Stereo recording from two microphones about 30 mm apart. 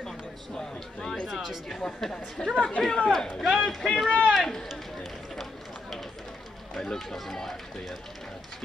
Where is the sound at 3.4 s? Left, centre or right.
Centre.